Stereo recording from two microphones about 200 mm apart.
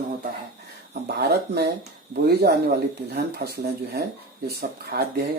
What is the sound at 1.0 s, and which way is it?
Speech, 55° right (ahead or behind).